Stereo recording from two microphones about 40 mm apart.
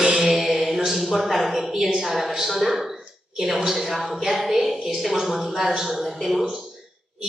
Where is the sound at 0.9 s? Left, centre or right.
Centre.